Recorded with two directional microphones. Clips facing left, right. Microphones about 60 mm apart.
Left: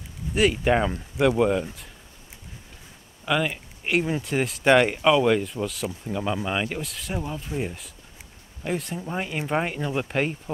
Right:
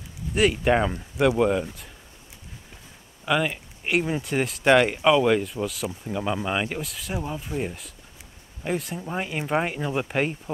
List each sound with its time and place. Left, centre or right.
0.3 s speech: centre
3.3 s speech: centre